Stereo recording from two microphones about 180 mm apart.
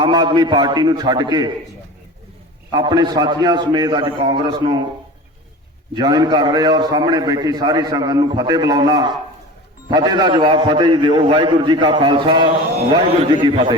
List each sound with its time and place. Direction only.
0.0 s a man's voice: 25° right (ahead or behind)
2.7 s a man's voice: 25° right (ahead or behind)
6.0 s a man's voice: 25° right (ahead or behind)